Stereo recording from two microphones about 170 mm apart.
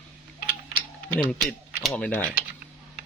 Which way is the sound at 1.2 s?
5° left (ahead or behind).